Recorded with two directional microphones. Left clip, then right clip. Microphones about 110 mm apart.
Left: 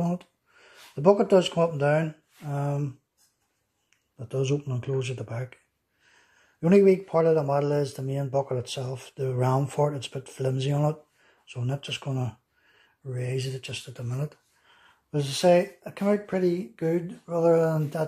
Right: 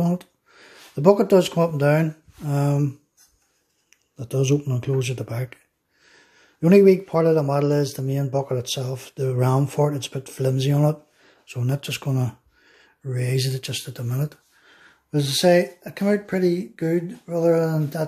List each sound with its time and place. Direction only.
0.0 s speech: 25° right (ahead or behind)
2.4 s speech: 40° right (ahead or behind)
3.9 s a man's voice: 20° right (ahead or behind)
13.9 s speech: 25° right (ahead or behind); by 18.0 s centre (ahead or behind)